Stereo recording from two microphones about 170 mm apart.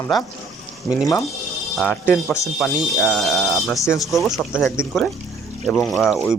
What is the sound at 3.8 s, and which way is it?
Speech, 20° left (ahead or behind).